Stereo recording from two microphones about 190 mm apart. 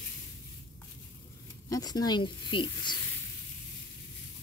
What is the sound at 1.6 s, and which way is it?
Speech, 20° left (ahead or behind).